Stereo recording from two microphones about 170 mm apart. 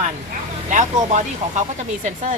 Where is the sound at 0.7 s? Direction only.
45° right (ahead or behind).